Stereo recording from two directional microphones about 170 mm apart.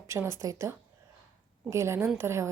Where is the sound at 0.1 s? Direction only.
15° right (ahead or behind).